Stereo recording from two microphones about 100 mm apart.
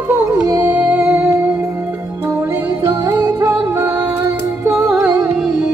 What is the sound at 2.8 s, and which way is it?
Music, 35° right (ahead or behind).